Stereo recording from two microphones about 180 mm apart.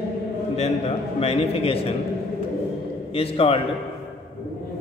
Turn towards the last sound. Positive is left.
turn(degrees=30)  # may be behind; listen again after turning